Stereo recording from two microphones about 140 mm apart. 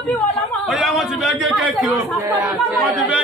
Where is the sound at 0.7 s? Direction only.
Centre (ahead or behind).